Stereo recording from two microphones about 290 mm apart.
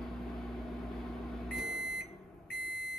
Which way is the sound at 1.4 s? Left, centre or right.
Centre.